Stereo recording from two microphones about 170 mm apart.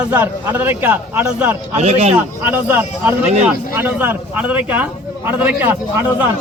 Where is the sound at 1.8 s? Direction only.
40° right (ahead or behind).